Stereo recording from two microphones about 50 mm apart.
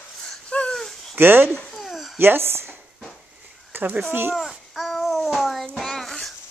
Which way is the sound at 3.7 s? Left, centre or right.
Right.